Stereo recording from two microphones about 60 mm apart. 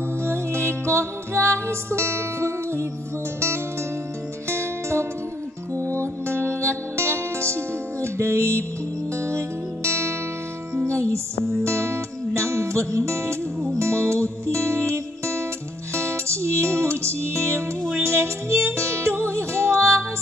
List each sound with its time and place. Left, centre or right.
0.2 s music: right
4.5 s music: right
9.8 s music: right